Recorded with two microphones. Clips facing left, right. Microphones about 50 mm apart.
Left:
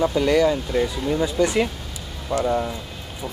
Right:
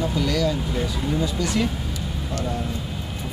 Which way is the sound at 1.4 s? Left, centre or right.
Left.